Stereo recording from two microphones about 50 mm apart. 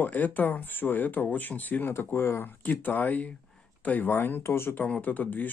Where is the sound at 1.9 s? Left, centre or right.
Left.